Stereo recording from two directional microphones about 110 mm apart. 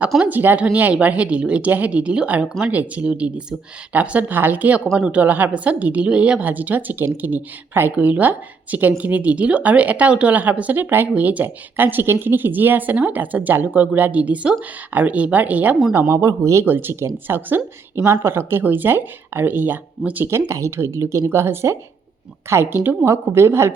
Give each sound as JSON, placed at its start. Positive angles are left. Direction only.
{"t": 0.2, "sound": "a woman's voice", "side_deg": -15}
{"t": 15.9, "sound": "speech", "side_deg": -25}